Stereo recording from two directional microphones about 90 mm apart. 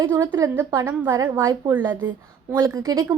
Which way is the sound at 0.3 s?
30° right (ahead or behind).